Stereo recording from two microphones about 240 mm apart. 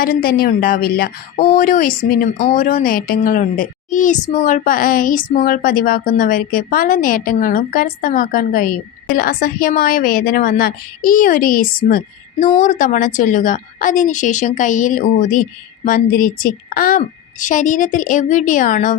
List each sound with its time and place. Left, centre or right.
0.0 s speech: left